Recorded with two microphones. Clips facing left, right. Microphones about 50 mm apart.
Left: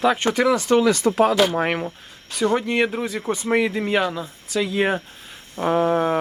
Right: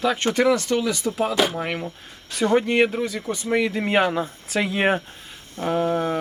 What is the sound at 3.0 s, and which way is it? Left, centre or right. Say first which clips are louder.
Speech: even; centre.